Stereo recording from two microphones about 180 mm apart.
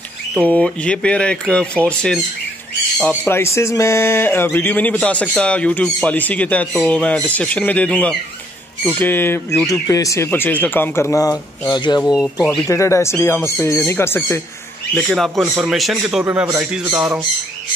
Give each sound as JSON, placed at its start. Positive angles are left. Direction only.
{"t": 0.3, "sound": "speech", "side_deg": 5}
{"t": 3.3, "sound": "speech", "side_deg": 15}
{"t": 12.4, "sound": "speech", "side_deg": 0}
{"t": 12.6, "sound": "speech", "side_deg": 15}
{"t": 15.0, "sound": "speech", "side_deg": 0}